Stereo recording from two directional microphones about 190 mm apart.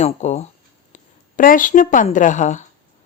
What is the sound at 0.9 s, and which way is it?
Speech, 45° left (ahead or behind).